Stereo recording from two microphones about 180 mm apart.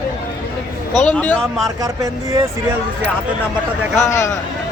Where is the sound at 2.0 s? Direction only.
20° right (ahead or behind).